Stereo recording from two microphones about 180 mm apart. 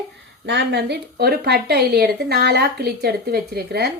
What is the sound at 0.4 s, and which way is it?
A woman's voice, 70° right (ahead or behind).